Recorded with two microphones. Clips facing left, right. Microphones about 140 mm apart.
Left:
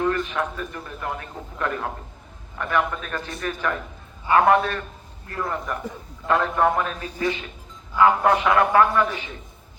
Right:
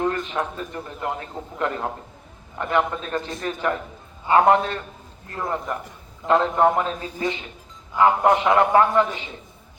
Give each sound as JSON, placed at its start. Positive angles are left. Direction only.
{"t": 0.0, "sound": "a man's voice", "side_deg": -25}